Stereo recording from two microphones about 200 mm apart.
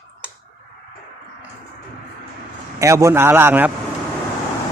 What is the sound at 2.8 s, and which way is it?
Speech, 15° right (ahead or behind).